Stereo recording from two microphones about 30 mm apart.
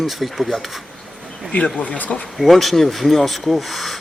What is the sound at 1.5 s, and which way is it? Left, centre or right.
Speech, left.